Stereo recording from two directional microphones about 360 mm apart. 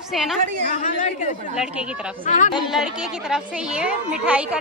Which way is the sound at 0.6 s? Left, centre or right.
Centre.